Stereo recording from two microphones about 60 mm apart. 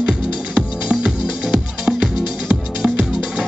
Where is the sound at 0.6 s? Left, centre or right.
Centre.